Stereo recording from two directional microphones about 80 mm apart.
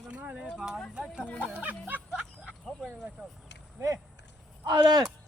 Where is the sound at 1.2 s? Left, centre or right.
Centre.